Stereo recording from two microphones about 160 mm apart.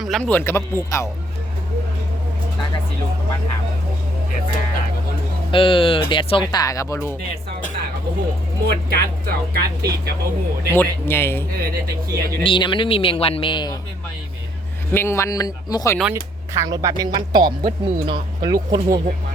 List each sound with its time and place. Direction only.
0.0 s speech: 5° left (ahead or behind)
5.5 s a man's voice: 30° left (ahead or behind)
8.6 s speech: 75° right (ahead or behind)
10.7 s speech: 15° left (ahead or behind)
11.5 s speech: 70° right (ahead or behind)
12.4 s speech: 30° left (ahead or behind)
14.9 s a man's voice: 15° left (ahead or behind)
16.6 s speech: 20° right (ahead or behind)